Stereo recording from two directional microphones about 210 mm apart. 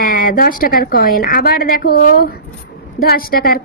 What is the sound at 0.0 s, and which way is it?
A woman's voice, 40° left (ahead or behind).